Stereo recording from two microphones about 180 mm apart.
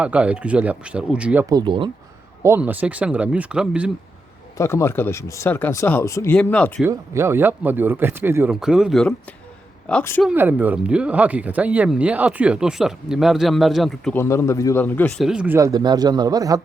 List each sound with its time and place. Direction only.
0.0 s speech: 5° right (ahead or behind)
1.5 s speech: 25° right (ahead or behind)
2.4 s speech: 10° right (ahead or behind)
4.5 s speech: 15° left (ahead or behind)
6.8 s speech: 15° right (ahead or behind); by 10.2 s 10° left (ahead or behind)
10.2 s speech: 10° right (ahead or behind)
14.2 s speech: 15° left (ahead or behind)
15.2 s speech: 5° right (ahead or behind)
15.5 s speech: 20° right (ahead or behind)